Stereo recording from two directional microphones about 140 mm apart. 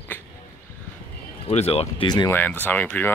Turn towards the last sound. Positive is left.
turn(degrees=10)  # may be behind; listen again after turning